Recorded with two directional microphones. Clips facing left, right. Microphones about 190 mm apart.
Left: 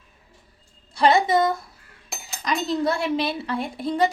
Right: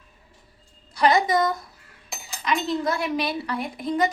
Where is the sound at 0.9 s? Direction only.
25° left (ahead or behind).